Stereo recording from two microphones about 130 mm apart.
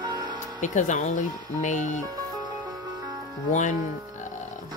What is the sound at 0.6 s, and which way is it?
Speech, 70° left (ahead or behind).